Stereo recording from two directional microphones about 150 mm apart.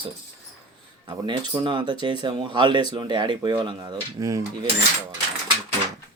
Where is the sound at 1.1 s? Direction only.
30° right (ahead or behind).